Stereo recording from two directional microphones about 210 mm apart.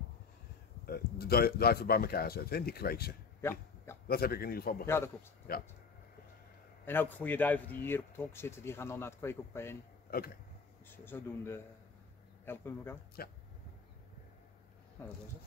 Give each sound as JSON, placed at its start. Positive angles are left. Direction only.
{"t": 0.8, "sound": "a man's voice", "side_deg": 45}
{"t": 3.3, "sound": "a sound", "side_deg": 10}
{"t": 4.1, "sound": "a man's voice", "side_deg": 45}
{"t": 4.8, "sound": "speech", "side_deg": 10}
{"t": 6.9, "sound": "speech", "side_deg": 10}
{"t": 10.1, "sound": "a man's voice", "side_deg": 45}
{"t": 11.1, "sound": "speech", "side_deg": 10}
{"t": 13.2, "sound": "a man's voice", "side_deg": 45}